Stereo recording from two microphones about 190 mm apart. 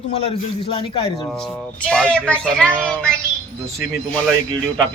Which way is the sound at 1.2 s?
5° left (ahead or behind).